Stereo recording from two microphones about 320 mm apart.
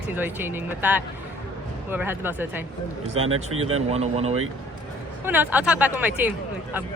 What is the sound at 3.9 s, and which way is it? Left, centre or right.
Speech, centre.